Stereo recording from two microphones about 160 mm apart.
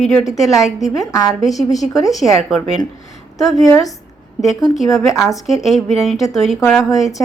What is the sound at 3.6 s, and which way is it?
Speech, 20° left (ahead or behind).